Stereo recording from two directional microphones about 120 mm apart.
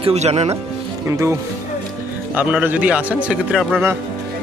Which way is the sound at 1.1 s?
25° right (ahead or behind).